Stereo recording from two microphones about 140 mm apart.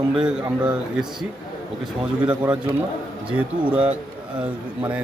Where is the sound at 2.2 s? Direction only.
10° right (ahead or behind).